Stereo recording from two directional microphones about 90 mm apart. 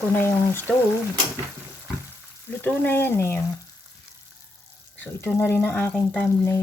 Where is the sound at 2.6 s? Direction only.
25° left (ahead or behind).